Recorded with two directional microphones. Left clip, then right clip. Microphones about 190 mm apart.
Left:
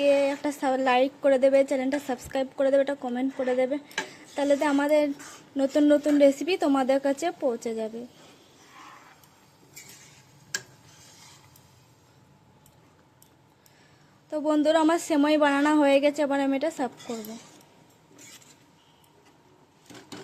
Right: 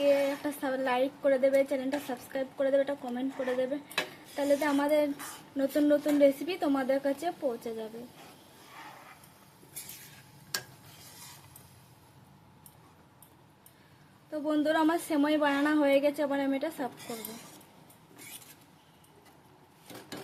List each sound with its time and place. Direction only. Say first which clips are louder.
0.0 s a woman's voice: left 4 dB; 35° left (ahead or behind)
14.3 s a woman's voice: left 6 dB; 35° left (ahead or behind)